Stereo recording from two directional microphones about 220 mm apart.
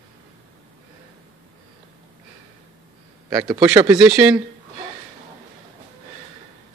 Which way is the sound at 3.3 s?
15° right (ahead or behind).